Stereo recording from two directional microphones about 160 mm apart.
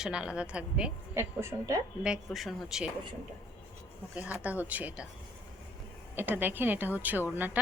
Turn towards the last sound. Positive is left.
turn(degrees=-10)  # may be behind; listen again after turning